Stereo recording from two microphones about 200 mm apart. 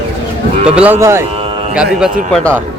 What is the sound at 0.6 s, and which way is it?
Speech, 5° right (ahead or behind).